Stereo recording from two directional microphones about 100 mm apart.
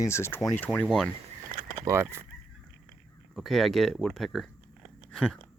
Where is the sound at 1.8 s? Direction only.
25° right (ahead or behind).